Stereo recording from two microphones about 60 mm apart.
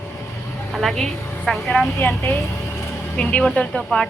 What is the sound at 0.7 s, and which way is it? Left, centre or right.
Speech, centre.